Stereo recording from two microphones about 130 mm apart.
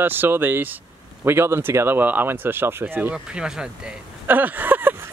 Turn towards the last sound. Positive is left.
turn(degrees=-15)  # may be behind; listen again after turning